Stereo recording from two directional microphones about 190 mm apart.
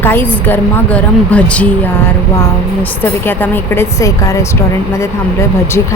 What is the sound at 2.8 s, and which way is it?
A woman's voice, 10° left (ahead or behind).